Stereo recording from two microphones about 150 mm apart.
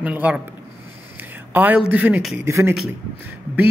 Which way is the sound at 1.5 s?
10° right (ahead or behind).